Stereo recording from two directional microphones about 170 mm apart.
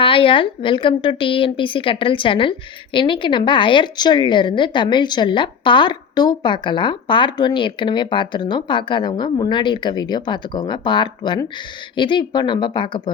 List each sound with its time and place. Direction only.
0.0 s a woman's voice: 30° left (ahead or behind)